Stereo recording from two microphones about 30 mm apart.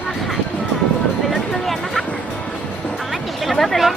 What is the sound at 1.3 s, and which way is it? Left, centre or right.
Music, centre.